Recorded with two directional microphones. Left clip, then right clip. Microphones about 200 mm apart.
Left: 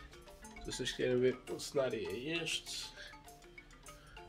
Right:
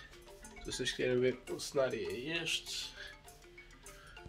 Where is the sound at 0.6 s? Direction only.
5° right (ahead or behind).